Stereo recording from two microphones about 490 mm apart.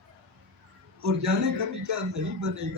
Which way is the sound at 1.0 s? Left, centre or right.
Right.